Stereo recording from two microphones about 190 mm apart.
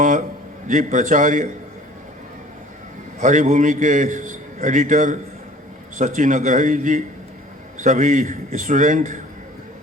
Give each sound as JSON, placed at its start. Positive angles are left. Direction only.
{"t": 0.7, "sound": "a man's voice", "side_deg": -45}
{"t": 3.2, "sound": "a man's voice", "side_deg": -40}